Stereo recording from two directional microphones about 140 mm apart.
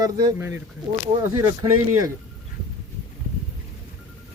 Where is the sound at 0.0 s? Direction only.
20° right (ahead or behind).